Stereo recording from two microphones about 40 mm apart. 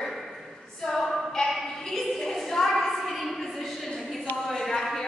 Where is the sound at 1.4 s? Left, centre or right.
Centre.